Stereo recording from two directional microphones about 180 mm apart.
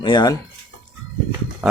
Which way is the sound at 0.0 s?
25° left (ahead or behind).